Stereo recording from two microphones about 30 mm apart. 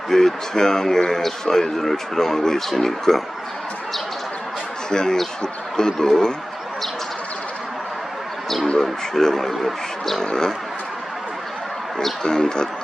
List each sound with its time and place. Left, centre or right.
0.1 s speech: centre
4.9 s speech: left
8.8 s speech: centre
12.2 s speech: left